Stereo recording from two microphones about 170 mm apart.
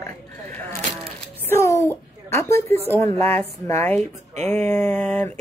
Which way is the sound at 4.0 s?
40° right (ahead or behind).